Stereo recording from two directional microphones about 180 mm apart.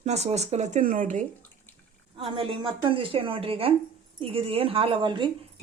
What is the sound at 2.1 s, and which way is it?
A woman's voice, 30° right (ahead or behind).